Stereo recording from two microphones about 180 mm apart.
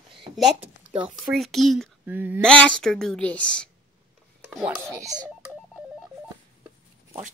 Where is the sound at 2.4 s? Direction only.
5° left (ahead or behind).